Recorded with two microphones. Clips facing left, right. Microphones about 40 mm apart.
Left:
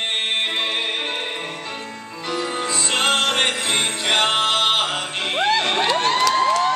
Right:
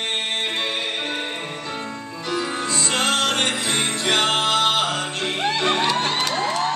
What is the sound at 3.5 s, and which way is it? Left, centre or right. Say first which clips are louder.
Music: left 1 dB; centre.